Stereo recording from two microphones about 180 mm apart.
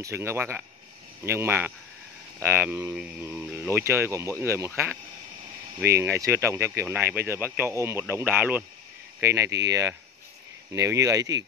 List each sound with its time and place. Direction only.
0.0 s speech: 15° right (ahead or behind)